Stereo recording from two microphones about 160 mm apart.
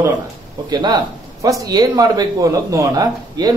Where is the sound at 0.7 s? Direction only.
25° right (ahead or behind).